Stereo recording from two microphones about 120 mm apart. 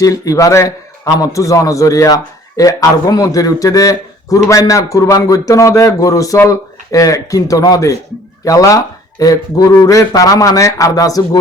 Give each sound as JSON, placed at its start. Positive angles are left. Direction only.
{"t": 0.0, "sound": "a man's voice", "side_deg": 30}